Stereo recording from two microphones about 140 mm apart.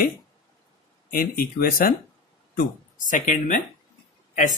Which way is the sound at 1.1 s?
90° left.